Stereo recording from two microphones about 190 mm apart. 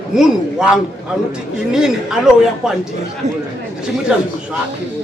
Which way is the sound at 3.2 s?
35° right (ahead or behind).